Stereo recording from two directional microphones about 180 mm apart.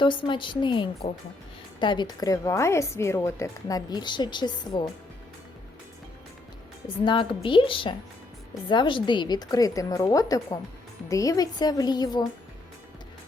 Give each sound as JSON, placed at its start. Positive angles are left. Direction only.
{"t": 0.0, "sound": "a woman's voice", "side_deg": 25}
{"t": 6.8, "sound": "a woman's voice", "side_deg": 25}